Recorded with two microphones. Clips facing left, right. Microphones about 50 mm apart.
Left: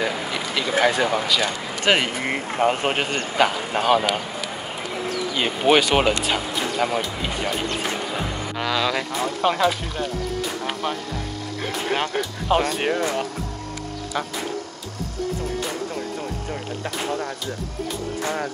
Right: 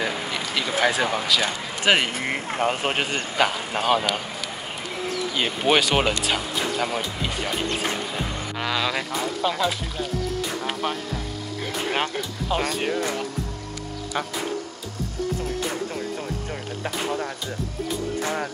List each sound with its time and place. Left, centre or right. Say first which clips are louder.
0.0 s speech: left 2 dB; centre
1.4 s speech: left 1 dB; centre
5.3 s speech: left 3 dB; centre
9.4 s speech: left 5 dB; left
10.7 s speech: even; centre
12.4 s speech: left 4 dB; left